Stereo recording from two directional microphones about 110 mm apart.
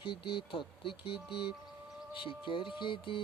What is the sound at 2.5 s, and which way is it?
Speech, 50° left (ahead or behind).